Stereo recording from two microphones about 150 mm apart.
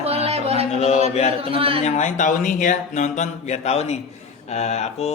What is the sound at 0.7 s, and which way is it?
Speech, 45° left (ahead or behind).